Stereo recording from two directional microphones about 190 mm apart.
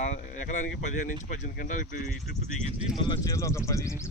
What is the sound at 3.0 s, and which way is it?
Speech, 20° left (ahead or behind).